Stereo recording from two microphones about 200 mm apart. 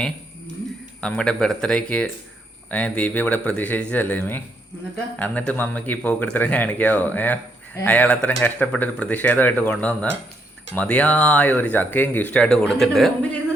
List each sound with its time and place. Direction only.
1.0 s speech: 5° left (ahead or behind)